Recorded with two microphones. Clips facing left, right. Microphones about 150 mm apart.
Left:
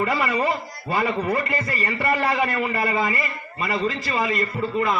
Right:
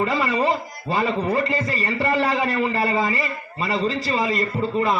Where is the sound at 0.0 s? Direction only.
25° right (ahead or behind).